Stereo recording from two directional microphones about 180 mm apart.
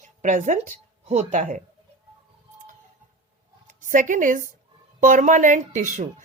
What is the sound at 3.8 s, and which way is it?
A woman's voice, 45° right (ahead or behind).